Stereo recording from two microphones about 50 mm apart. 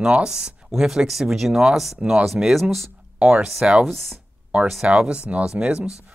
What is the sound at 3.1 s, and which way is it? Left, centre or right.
Speech, right.